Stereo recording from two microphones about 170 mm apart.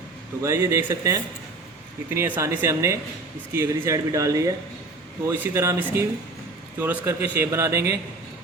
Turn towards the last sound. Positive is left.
turn(degrees=-20)  # may be behind; listen again after turning